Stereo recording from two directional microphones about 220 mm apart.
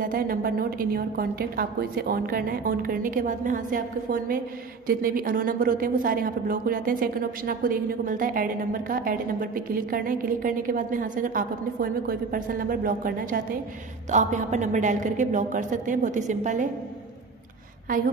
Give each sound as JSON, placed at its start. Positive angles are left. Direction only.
{"t": 0.0, "sound": "speech", "side_deg": -40}